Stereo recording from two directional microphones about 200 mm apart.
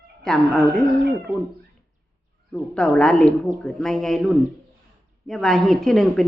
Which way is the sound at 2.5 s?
5° left (ahead or behind).